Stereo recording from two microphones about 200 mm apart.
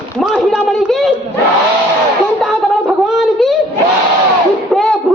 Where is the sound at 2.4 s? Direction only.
Centre (ahead or behind).